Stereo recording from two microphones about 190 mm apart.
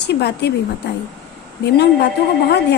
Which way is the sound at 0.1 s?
60° left (ahead or behind).